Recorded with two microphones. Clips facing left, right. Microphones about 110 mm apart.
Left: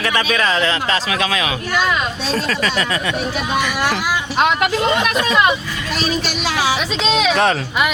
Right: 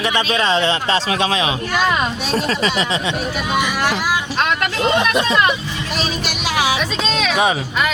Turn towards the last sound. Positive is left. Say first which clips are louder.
# left 1 dB
turn(degrees=-10)  # may be behind; listen again after turning